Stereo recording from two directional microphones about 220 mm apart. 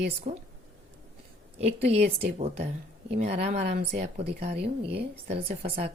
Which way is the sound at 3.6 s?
50° right (ahead or behind).